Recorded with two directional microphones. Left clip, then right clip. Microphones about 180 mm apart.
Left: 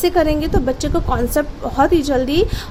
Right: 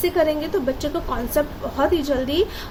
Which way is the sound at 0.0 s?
55° left (ahead or behind).